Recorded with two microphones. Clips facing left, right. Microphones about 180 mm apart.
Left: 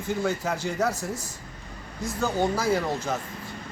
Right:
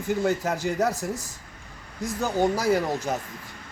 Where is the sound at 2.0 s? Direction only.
15° right (ahead or behind).